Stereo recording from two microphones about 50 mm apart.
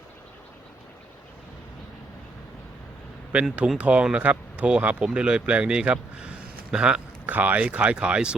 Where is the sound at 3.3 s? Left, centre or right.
Right.